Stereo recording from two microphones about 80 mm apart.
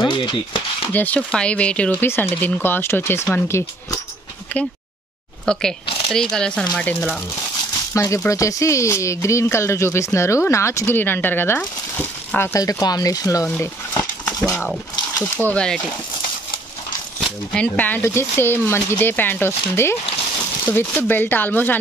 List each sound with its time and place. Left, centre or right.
0.0 s speech: left
0.9 s speech: centre
4.5 s speech: left
5.4 s speech: centre
7.9 s speech: left
11.0 s speech: left
12.5 s speech: left
15.3 s speech: centre
17.6 s speech: left
18.0 s speech: left